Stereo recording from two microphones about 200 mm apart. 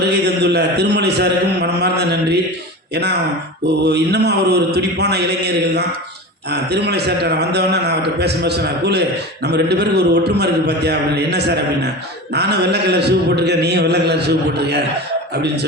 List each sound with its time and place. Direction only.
0.1 s a man's voice: 55° right (ahead or behind)